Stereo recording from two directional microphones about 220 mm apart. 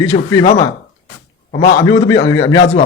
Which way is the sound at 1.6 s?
15° left (ahead or behind).